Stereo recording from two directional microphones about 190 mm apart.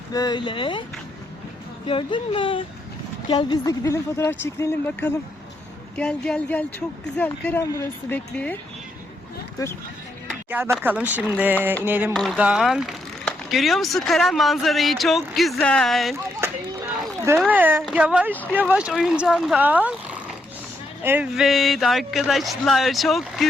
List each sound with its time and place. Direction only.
0.1 s speech: 20° left (ahead or behind)
1.9 s speech: 25° left (ahead or behind); by 8.5 s 10° left (ahead or behind)
10.5 s speech: 10° right (ahead or behind)
12.1 s speech: centre (ahead or behind)
17.2 s speech: 10° right (ahead or behind)